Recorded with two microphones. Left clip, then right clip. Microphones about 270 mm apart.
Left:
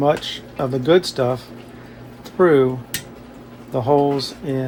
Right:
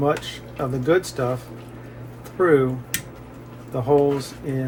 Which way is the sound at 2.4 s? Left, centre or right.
Left.